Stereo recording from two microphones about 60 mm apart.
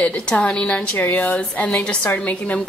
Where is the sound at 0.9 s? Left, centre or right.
Left.